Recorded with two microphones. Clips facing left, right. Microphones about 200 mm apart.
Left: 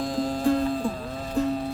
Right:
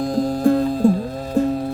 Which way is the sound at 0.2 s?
45° right (ahead or behind).